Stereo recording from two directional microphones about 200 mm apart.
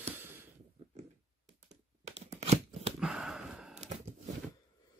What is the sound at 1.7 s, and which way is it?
Tearing, 35° right (ahead or behind).